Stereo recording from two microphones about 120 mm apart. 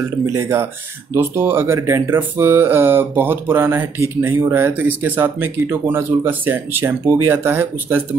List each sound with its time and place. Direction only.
0.2 s speech: 25° right (ahead or behind)